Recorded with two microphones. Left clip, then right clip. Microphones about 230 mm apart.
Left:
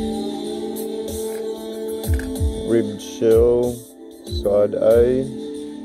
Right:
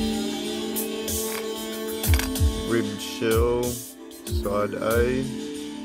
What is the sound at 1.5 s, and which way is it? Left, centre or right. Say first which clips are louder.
Music: left 4 dB; right.